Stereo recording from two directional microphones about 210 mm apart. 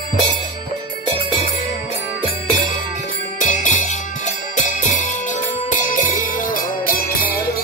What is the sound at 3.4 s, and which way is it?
Music, 35° left (ahead or behind).